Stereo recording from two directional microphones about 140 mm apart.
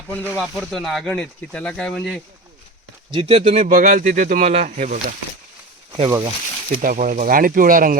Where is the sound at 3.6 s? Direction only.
80° right; by 5.0 s 60° right (ahead or behind).